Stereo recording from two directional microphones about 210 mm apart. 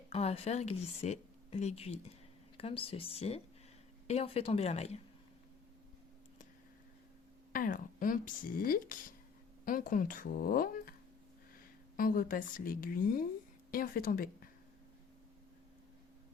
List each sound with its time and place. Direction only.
0.1 s a woman's voice: 30° left (ahead or behind)
7.5 s speech: 40° left (ahead or behind)
11.9 s a woman's voice: 40° left (ahead or behind)